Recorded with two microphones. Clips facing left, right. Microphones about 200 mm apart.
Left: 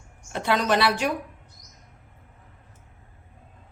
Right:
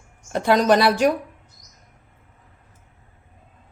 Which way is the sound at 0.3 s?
40° right (ahead or behind).